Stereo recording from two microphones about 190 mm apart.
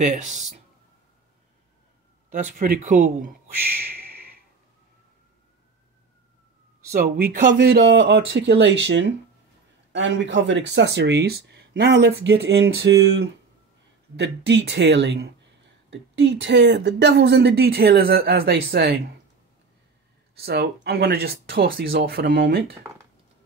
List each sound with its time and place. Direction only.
0.0 s speech: 40° right (ahead or behind)
2.2 s speech: 45° right (ahead or behind)
6.9 s speech: 55° right (ahead or behind)
8.0 s speech: 70° right (ahead or behind)
15.9 s speech: 75° right (ahead or behind); by 18.9 s 55° right (ahead or behind)
20.3 s speech: 55° right (ahead or behind)